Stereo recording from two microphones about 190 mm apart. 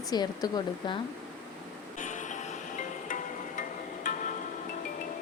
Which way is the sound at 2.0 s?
40° left (ahead or behind).